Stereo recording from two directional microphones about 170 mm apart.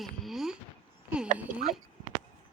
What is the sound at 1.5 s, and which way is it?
Speech, 55° right (ahead or behind).